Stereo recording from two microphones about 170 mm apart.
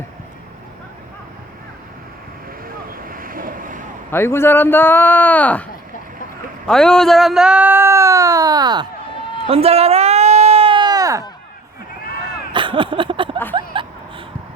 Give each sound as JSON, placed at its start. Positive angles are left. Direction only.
{"t": 2.6, "sound": "boat", "side_deg": -60}
{"t": 4.1, "sound": "a man's voice", "side_deg": 15}
{"t": 6.7, "sound": "speech", "side_deg": 5}
{"t": 9.5, "sound": "sheep", "side_deg": -35}
{"t": 12.5, "sound": "a sound", "side_deg": -30}